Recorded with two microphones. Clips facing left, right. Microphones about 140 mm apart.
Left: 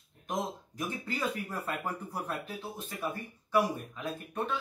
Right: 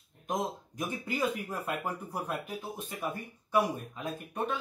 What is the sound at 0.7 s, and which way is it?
Speech, 15° right (ahead or behind).